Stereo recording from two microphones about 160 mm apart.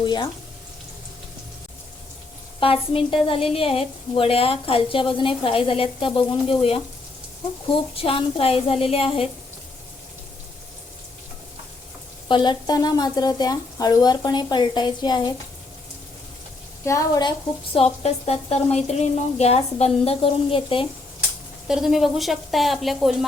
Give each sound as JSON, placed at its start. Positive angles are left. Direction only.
{"t": 0.0, "sound": "speech", "side_deg": 30}
{"t": 2.6, "sound": "a woman's voice", "side_deg": 35}
{"t": 7.9, "sound": "a woman's voice", "side_deg": 35}
{"t": 12.3, "sound": "speech", "side_deg": 30}
{"t": 16.8, "sound": "speech", "side_deg": 20}
{"t": 17.7, "sound": "a woman's voice", "side_deg": 40}
{"t": 21.7, "sound": "speech", "side_deg": 0}